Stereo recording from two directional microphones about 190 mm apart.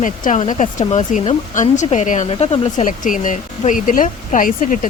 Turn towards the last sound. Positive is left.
turn(degrees=45)  # may be behind; listen again after turning